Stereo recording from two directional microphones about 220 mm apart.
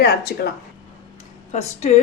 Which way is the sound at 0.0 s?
45° left (ahead or behind).